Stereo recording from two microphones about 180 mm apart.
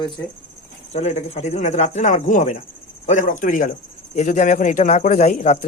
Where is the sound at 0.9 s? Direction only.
35° left (ahead or behind).